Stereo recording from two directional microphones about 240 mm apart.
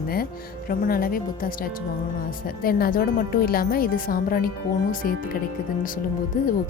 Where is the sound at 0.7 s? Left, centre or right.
Left.